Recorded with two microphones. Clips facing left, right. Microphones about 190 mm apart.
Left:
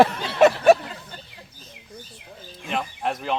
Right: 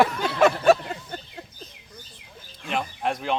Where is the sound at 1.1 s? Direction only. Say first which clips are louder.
Right 6 dB; 50° right (ahead or behind).